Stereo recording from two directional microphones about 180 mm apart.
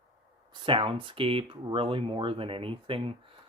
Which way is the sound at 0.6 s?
30° right (ahead or behind).